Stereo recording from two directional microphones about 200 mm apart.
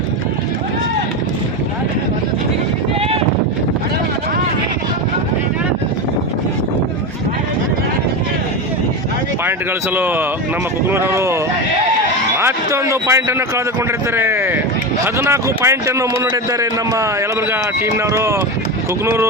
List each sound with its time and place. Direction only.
9.4 s speech: 10° right (ahead or behind)
12.4 s speech: 15° right (ahead or behind)